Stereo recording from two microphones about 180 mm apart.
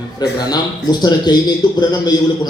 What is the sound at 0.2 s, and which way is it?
A man's voice, 20° left (ahead or behind).